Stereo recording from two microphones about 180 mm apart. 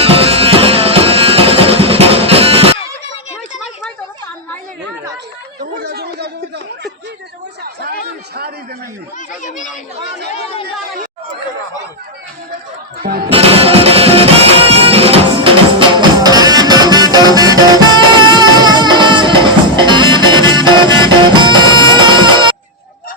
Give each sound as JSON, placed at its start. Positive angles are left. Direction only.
{"t": 0.0, "sound": "music", "side_deg": -30}
{"t": 5.7, "sound": "a sound", "side_deg": -60}
{"t": 13.0, "sound": "speech", "side_deg": -55}
{"t": 13.3, "sound": "music", "side_deg": -30}